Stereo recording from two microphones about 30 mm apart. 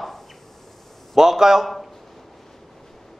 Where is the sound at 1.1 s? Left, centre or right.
Centre.